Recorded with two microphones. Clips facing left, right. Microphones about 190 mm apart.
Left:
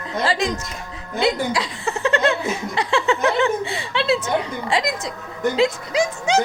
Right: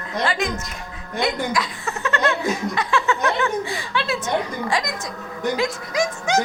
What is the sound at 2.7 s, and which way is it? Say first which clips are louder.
Speech: left 2 dB; 25° left (ahead or behind).